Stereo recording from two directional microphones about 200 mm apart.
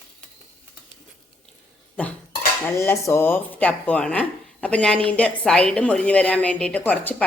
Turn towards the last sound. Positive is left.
turn(degrees=10)  # may be behind; listen again after turning